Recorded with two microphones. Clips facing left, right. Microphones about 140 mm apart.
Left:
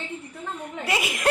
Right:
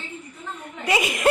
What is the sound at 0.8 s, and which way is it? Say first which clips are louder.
Speech: right 5 dB; centre (ahead or behind).